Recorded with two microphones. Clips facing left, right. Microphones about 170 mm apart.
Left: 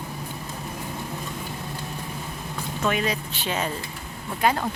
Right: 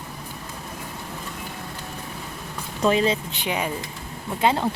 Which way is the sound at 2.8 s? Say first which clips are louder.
Right 5 dB; 30° right (ahead or behind).